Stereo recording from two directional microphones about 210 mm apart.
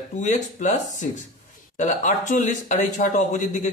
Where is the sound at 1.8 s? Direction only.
35° left (ahead or behind).